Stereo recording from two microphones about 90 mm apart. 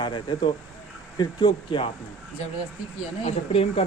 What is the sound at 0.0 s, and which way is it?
Speech, 55° left (ahead or behind).